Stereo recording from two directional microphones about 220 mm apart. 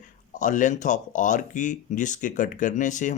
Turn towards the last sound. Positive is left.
turn(degrees=35)  # may be behind; listen again after turning